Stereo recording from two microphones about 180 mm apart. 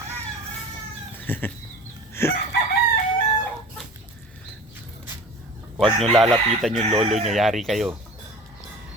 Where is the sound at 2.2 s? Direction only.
15° left (ahead or behind).